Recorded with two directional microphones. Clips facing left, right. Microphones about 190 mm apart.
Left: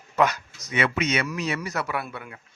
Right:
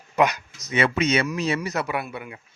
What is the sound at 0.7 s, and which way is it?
Speech, 30° right (ahead or behind).